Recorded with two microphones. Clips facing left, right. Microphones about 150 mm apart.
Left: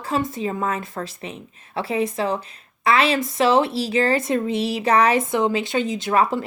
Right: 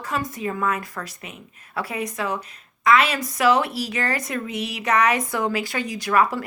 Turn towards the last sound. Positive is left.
turn(degrees=25)  # may be behind; listen again after turning